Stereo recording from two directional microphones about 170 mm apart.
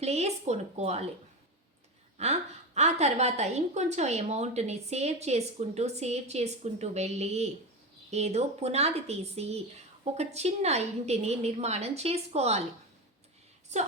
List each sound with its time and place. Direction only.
0.0 s a woman's voice: 40° right (ahead or behind)
2.1 s a woman's voice: 40° right (ahead or behind)
13.7 s speech: 45° right (ahead or behind)